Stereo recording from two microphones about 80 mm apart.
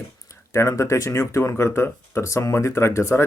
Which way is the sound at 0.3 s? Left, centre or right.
Left.